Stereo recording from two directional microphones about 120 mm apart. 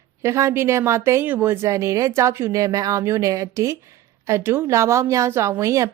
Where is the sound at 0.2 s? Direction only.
25° right (ahead or behind).